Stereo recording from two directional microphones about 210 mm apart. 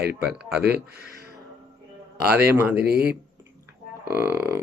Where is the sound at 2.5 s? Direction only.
5° right (ahead or behind).